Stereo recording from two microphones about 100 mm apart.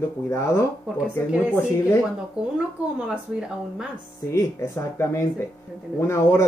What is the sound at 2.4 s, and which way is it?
Speech, 10° right (ahead or behind).